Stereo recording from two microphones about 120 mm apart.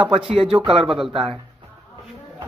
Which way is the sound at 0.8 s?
5° right (ahead or behind).